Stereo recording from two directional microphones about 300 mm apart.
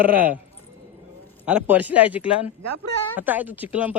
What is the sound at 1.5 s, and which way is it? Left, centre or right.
Speech, centre.